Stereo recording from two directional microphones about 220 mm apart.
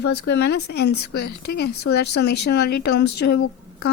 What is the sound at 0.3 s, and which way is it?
Speech, 50° left (ahead or behind).